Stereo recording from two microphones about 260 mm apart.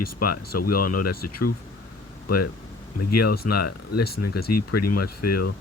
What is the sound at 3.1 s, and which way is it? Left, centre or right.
Speech, left.